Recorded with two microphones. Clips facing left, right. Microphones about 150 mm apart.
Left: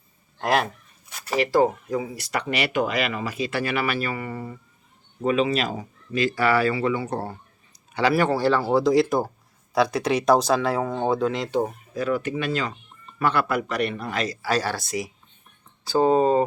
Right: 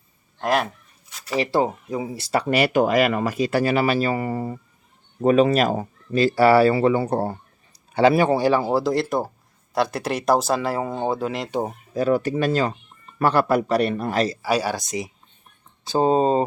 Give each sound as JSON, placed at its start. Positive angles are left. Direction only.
{"t": 1.4, "sound": "speech", "side_deg": -25}
{"t": 6.1, "sound": "speech", "side_deg": -35}
{"t": 7.9, "sound": "speech", "side_deg": -25}
{"t": 8.7, "sound": "speech", "side_deg": 0}
{"t": 11.6, "sound": "speech", "side_deg": -35}
{"t": 14.4, "sound": "speech", "side_deg": -10}